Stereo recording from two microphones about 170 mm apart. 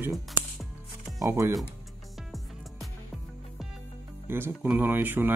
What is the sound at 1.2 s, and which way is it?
Speech, 20° right (ahead or behind).